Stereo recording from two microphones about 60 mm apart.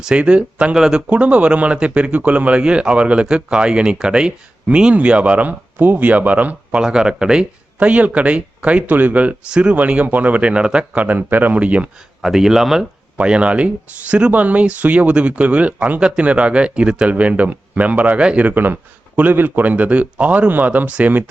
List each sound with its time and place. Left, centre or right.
0.0 s speech: centre
6.8 s speech: centre
9.5 s speech: centre
12.2 s speech: centre
13.1 s speech: centre
18.5 s speech: right